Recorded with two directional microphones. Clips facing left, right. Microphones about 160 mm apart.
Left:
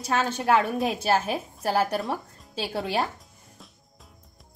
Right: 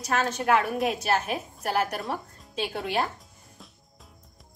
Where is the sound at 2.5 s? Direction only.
35° left (ahead or behind).